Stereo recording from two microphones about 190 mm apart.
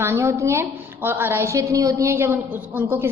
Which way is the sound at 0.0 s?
15° right (ahead or behind).